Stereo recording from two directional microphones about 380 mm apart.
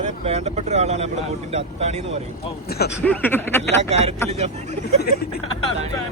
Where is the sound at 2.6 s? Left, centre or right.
Left.